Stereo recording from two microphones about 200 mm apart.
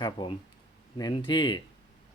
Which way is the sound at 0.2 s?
20° left (ahead or behind).